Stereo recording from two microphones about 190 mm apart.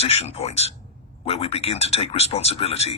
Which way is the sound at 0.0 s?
35° left (ahead or behind).